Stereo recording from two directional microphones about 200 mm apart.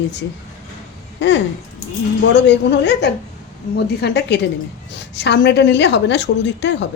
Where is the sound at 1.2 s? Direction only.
60° left (ahead or behind).